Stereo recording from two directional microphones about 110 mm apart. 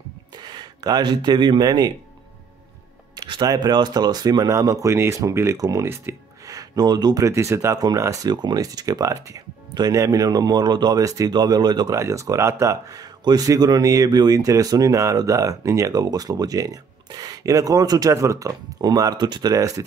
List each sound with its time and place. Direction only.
0.4 s speech: 40° right (ahead or behind)
3.2 s speech: 40° right (ahead or behind)
12.0 s speech: 30° right (ahead or behind)